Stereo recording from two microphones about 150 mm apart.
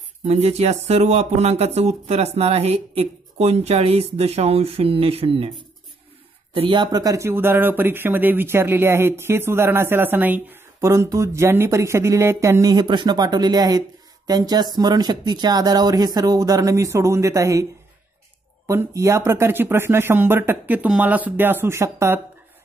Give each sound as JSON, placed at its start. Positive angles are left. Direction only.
{"t": 0.2, "sound": "speech", "side_deg": -45}
{"t": 6.5, "sound": "speech", "side_deg": -35}
{"t": 18.7, "sound": "speech", "side_deg": -20}